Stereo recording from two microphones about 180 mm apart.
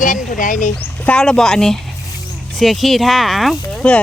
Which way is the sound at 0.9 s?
10° left (ahead or behind).